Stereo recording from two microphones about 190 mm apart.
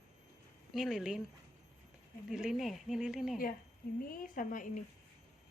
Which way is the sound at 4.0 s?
50° left (ahead or behind).